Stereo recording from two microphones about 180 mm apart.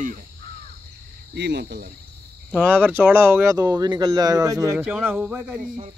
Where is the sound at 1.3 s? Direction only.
65° right (ahead or behind).